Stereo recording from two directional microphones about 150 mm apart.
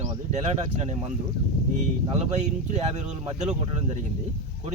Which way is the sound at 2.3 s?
50° right (ahead or behind).